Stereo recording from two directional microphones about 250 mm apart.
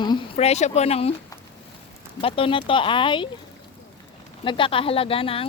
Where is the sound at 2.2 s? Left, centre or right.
Left.